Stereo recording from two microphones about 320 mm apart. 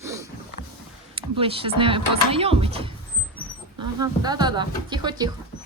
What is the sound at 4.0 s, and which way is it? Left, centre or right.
Speech, centre.